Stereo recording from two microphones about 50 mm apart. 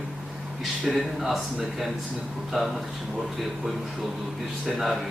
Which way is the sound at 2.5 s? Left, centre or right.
Centre.